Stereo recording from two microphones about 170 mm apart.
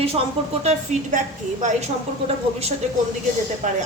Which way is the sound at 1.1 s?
45° right (ahead or behind).